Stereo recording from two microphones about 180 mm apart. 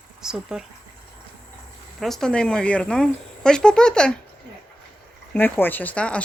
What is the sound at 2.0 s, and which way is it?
Speech, centre (ahead or behind).